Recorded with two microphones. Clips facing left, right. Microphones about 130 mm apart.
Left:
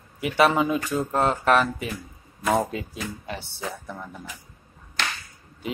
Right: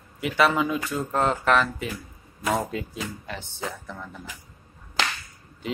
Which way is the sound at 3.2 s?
15° left (ahead or behind).